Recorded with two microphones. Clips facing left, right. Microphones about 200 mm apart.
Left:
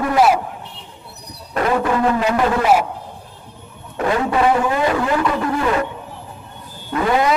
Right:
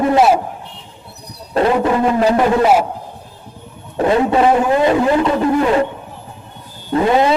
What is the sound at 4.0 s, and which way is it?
A man's voice, 25° right (ahead or behind).